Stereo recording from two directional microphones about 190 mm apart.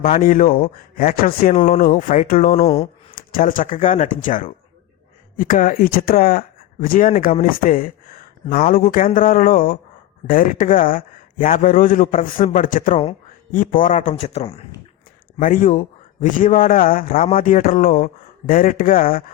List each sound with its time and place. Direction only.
0.0 s a man's voice: 50° left (ahead or behind)
2.6 s speech: 35° left (ahead or behind)
3.2 s a man's voice: 45° left (ahead or behind)
15.4 s a man's voice: 45° left (ahead or behind)